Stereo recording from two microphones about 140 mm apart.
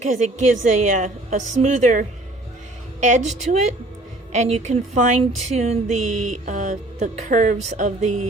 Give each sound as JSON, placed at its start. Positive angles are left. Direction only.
{"t": 0.0, "sound": "speech", "side_deg": -55}